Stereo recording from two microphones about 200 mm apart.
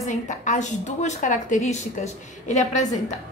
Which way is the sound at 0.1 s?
40° left (ahead or behind).